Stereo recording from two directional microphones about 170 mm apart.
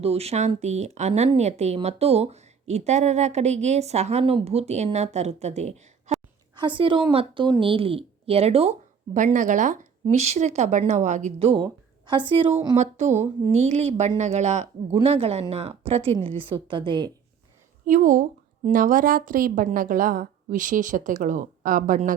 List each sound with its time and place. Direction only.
0.0 s a woman's voice: 35° right (ahead or behind)
6.6 s a woman's voice: 30° right (ahead or behind)
9.1 s a woman's voice: 50° right (ahead or behind); by 12.5 s 30° right (ahead or behind)
12.7 s a woman's voice: 40° right (ahead or behind)
17.8 s a woman's voice: 50° right (ahead or behind)